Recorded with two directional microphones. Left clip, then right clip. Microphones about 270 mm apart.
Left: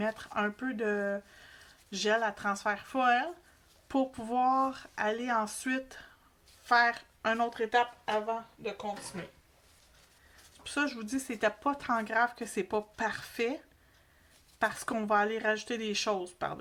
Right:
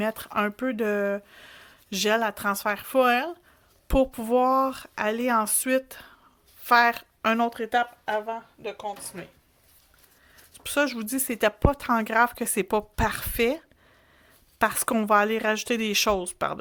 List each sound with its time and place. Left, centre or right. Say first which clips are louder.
0.0 s speech: right 6 dB; right
10.6 s speech: right 8 dB; right
14.6 s speech: right 7 dB; right